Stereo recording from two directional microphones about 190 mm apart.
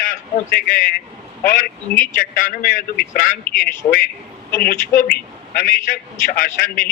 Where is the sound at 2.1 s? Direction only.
45° left (ahead or behind).